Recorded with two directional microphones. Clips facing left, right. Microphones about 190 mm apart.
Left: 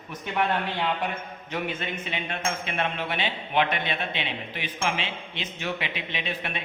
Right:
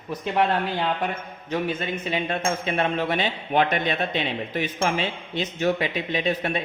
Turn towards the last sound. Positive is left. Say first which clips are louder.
# right 8 dB
turn(degrees=-40)  # may be behind; listen again after turning